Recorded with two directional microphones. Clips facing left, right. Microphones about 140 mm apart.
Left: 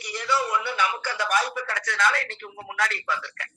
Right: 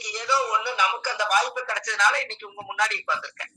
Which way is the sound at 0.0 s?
20° right (ahead or behind).